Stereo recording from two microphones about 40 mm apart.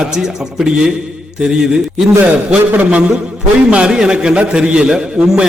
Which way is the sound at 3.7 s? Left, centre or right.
Right.